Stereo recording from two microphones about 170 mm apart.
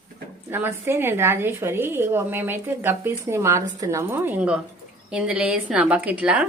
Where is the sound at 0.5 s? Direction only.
10° right (ahead or behind).